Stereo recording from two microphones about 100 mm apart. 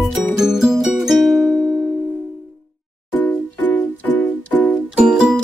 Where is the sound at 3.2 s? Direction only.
15° left (ahead or behind).